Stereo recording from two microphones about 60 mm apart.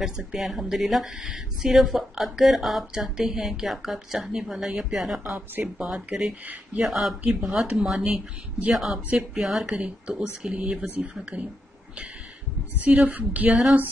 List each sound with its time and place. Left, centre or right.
0.0 s speech: centre
5.3 s speech: centre
6.8 s speech: centre
7.2 s speech: centre
8.0 s speech: right
8.7 s speech: centre
9.8 s speech: centre
12.8 s speech: right
13.5 s speech: centre